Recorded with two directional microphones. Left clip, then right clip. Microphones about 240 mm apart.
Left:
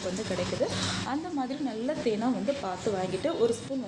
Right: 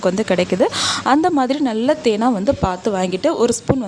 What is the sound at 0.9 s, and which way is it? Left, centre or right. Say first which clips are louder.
A woman's voice: right 17 dB; right.